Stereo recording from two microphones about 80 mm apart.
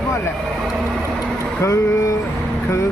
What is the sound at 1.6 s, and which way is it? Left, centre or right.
Speech, left.